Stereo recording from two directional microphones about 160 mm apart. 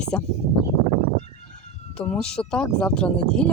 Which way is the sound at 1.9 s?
5° left (ahead or behind).